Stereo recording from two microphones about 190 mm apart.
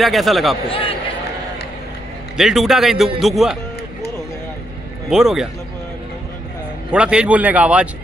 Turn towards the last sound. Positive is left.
turn(degrees=-5)  # may be behind; listen again after turning